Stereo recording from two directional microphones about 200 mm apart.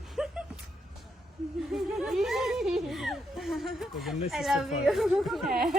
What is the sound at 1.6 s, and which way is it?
Speech, centre (ahead or behind).